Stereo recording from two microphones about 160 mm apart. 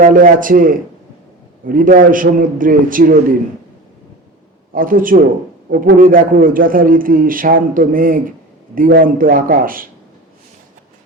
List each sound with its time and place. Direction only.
0.0 s a man's voice: 60° right (ahead or behind)
4.7 s a man's voice: 60° right (ahead or behind)